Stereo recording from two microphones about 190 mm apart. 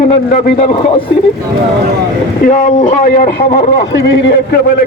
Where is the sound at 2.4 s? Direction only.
45° left (ahead or behind); by 4.4 s 70° left (ahead or behind).